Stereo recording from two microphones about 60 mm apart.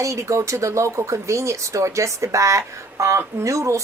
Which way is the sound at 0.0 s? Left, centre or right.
Right.